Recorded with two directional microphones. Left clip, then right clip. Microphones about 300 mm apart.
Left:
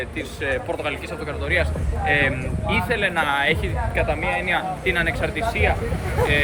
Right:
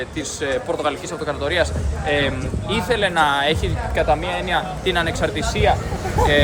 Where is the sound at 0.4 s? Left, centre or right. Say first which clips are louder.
Right 3 dB; centre.